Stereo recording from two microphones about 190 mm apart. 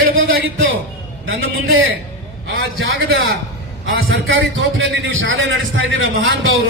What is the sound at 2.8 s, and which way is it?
A man's voice, 90° right.